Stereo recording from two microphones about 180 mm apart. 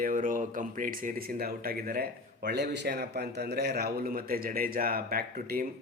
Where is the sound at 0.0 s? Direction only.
50° right (ahead or behind).